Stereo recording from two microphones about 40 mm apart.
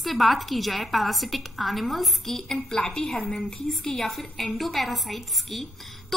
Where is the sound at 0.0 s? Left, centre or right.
Centre.